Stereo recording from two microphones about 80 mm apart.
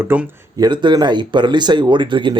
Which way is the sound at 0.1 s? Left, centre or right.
Right.